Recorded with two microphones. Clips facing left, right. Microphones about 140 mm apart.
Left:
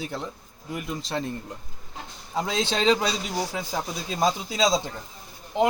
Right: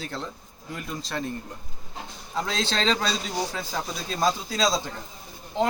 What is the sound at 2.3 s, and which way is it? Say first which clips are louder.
Speech: left 2 dB; 15° left (ahead or behind).